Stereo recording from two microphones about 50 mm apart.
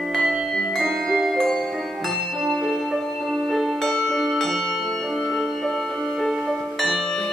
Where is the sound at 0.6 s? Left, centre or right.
Centre.